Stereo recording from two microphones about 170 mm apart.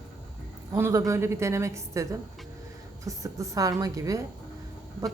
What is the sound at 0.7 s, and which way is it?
Speech, 15° right (ahead or behind).